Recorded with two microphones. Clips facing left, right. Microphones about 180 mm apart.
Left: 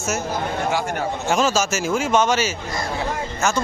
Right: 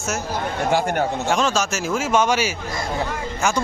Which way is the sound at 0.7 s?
55° right (ahead or behind).